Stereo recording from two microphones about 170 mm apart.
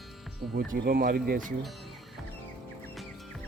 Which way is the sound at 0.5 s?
60° right (ahead or behind).